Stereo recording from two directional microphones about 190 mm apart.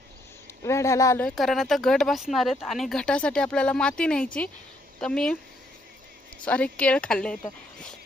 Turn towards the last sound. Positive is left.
turn(degrees=5)  # may be behind; listen again after turning